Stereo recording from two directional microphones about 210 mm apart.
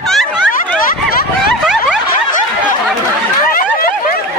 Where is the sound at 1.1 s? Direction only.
45° left (ahead or behind).